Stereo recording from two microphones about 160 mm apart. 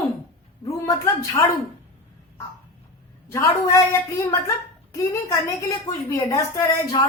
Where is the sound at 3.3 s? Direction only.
20° left (ahead or behind).